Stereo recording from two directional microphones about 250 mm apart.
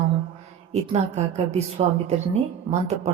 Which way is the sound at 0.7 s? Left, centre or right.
Right.